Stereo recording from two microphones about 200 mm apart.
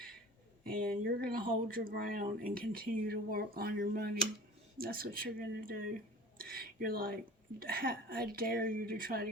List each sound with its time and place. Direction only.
0.6 s speech: 45° right (ahead or behind)